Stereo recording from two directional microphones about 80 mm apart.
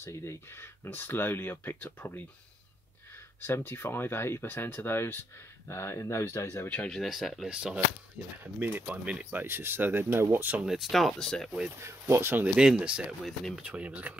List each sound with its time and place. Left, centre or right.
0.0 s speech: left
3.4 s speech: left
6.9 s speech: centre
7.4 s speech: centre
10.6 s speech: centre
11.8 s speech: right
12.4 s speech: centre
13.2 s speech: centre
13.6 s speech: centre